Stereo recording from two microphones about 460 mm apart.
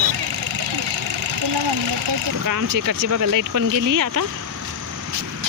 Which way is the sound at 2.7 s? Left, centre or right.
Right.